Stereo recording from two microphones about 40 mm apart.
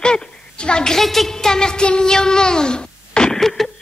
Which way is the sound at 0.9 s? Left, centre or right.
Centre.